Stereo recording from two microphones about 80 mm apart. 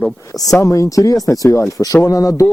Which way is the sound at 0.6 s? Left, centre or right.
Left.